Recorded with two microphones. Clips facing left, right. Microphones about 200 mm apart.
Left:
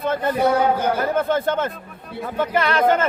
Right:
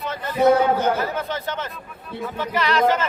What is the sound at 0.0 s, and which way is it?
A man's voice, 50° left (ahead or behind).